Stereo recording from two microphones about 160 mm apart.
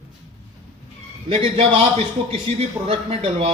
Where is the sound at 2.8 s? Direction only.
40° right (ahead or behind).